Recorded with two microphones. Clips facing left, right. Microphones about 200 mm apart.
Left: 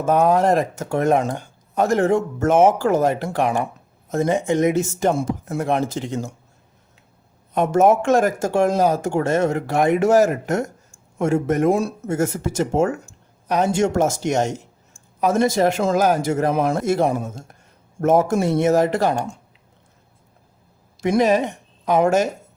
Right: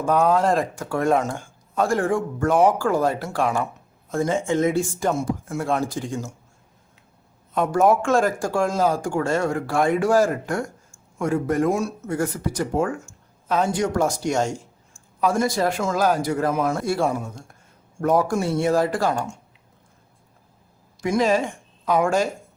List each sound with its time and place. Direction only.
0.0 s speech: 20° left (ahead or behind)
7.5 s speech: 20° left (ahead or behind)
21.0 s a woman's voice: 20° left (ahead or behind)